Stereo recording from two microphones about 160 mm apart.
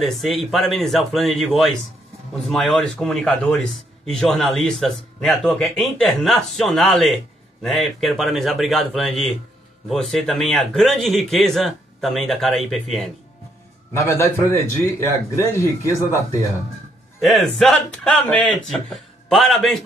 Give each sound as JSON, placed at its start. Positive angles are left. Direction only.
{"t": 0.0, "sound": "speech", "side_deg": 0}
{"t": 13.9, "sound": "a man's voice", "side_deg": 15}
{"t": 17.2, "sound": "speech", "side_deg": 0}